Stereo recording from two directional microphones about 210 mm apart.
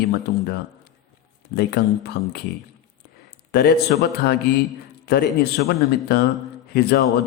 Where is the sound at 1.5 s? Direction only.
50° left (ahead or behind).